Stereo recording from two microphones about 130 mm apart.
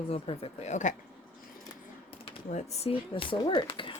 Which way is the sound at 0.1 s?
50° left (ahead or behind).